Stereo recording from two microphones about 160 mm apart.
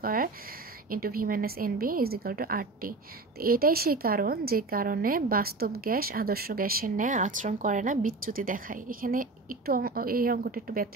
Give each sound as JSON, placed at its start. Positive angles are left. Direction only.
{"t": 0.0, "sound": "a woman's voice", "side_deg": -60}